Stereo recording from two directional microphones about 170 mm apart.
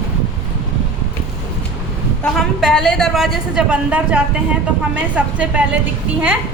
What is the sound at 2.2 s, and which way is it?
A woman's voice, centre (ahead or behind).